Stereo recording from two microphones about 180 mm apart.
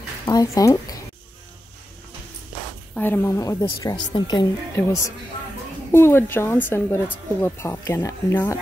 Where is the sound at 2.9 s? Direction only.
10° left (ahead or behind).